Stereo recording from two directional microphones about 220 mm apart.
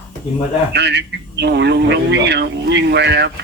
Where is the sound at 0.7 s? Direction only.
50° right (ahead or behind).